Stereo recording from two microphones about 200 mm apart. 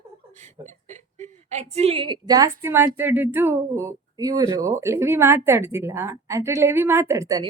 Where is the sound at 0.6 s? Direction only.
35° right (ahead or behind).